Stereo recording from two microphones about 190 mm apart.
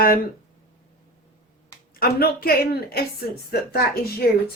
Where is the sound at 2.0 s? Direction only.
50° left (ahead or behind).